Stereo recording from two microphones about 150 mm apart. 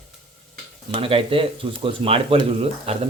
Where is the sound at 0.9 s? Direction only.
40° right (ahead or behind).